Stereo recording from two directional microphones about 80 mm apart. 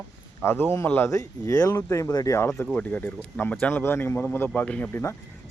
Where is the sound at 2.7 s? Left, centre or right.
Centre.